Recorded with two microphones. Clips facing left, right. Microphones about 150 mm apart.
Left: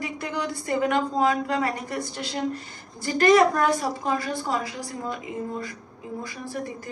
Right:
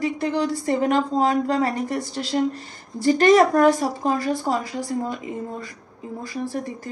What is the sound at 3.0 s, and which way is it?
Speech, 40° right (ahead or behind).